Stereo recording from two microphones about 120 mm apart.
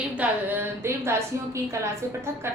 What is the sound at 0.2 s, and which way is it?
A woman's voice, 20° right (ahead or behind).